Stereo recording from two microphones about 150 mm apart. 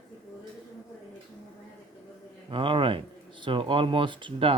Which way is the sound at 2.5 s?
35° right (ahead or behind).